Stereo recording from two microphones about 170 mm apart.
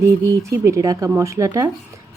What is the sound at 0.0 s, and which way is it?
A woman's voice, 15° right (ahead or behind).